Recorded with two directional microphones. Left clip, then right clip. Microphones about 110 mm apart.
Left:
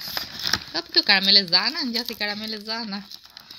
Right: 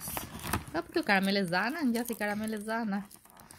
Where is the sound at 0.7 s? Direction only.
30° right (ahead or behind).